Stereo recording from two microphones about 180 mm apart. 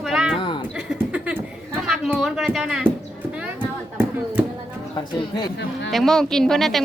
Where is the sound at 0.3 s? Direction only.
30° left (ahead or behind).